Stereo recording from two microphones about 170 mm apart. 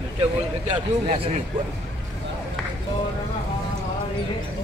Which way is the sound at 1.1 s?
35° right (ahead or behind).